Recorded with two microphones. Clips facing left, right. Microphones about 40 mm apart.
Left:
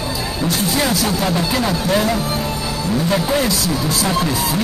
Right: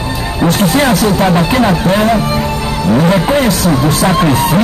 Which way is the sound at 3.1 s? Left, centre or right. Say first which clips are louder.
Right 6 dB; right.